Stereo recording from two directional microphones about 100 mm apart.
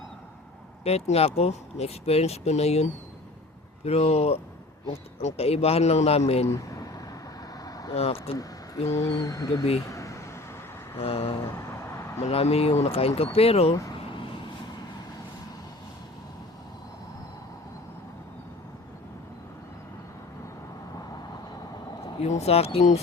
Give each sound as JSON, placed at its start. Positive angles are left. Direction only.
{"t": 0.9, "sound": "speech", "side_deg": 90}
{"t": 3.8, "sound": "speech", "side_deg": 90}
{"t": 5.4, "sound": "speech", "side_deg": 90}
{"t": 6.5, "sound": "a sound", "side_deg": 35}
{"t": 7.6, "sound": "vehicle", "side_deg": 40}
{"t": 7.9, "sound": "speech", "side_deg": 85}
{"t": 8.9, "sound": "speech", "side_deg": 35}
{"t": 9.9, "sound": "vehicle", "side_deg": 30}
{"t": 10.9, "sound": "a sound", "side_deg": 80}
{"t": 12.2, "sound": "speech", "side_deg": 90}
{"t": 22.2, "sound": "speech", "side_deg": 90}